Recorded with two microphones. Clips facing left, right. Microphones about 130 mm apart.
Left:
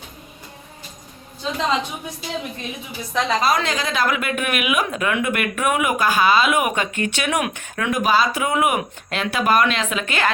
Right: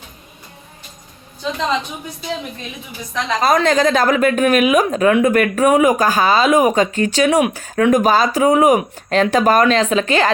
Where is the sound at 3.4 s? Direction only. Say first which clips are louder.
Right 7 dB; 45° right (ahead or behind).